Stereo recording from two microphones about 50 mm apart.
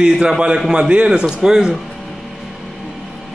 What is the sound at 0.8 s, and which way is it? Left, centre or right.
Speech, right.